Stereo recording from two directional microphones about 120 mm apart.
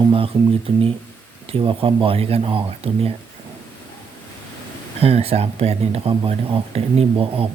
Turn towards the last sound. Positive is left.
turn(degrees=-50)  # may be behind; listen again after turning